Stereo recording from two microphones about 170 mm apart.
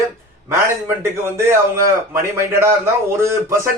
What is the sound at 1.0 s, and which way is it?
A man's voice, 15° right (ahead or behind).